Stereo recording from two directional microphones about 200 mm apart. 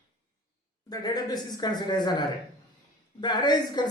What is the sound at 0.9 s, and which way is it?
Speech, 20° left (ahead or behind).